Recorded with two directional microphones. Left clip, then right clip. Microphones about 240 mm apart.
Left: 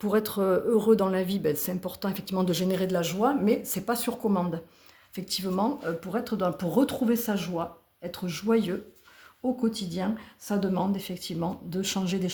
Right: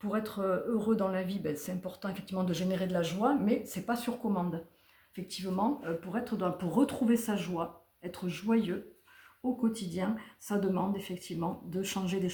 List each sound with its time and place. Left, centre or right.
0.0 s speech: left